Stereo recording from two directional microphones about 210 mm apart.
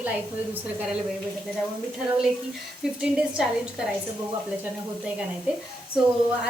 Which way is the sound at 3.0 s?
5° right (ahead or behind).